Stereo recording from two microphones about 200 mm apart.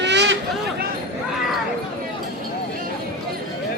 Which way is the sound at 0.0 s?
60° right (ahead or behind).